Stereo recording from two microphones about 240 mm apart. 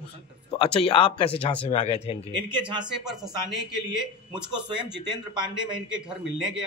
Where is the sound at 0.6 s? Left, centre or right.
Left.